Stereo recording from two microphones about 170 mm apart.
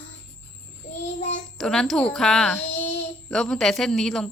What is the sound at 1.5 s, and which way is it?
A woman's voice, 5° left (ahead or behind).